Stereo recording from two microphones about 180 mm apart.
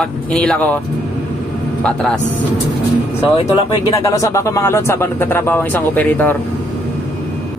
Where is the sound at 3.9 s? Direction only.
15° left (ahead or behind).